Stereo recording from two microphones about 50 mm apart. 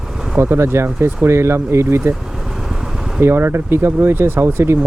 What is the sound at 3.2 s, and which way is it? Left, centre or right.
Speech, right.